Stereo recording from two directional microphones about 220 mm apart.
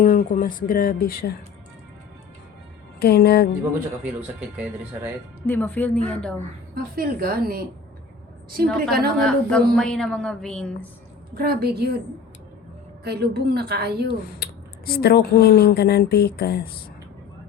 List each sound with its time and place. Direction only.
0.0 s speech: 40° left (ahead or behind)
3.0 s speech: 45° left (ahead or behind)
4.0 s speech: 5° right (ahead or behind)
5.5 s speech: 10° left (ahead or behind)
6.7 s a woman's voice: 40° right (ahead or behind)
8.6 s a woman's voice: centre (ahead or behind)
11.3 s a woman's voice: 45° right (ahead or behind)
13.1 s a woman's voice: 45° right (ahead or behind)
14.3 s speech: 45° left (ahead or behind)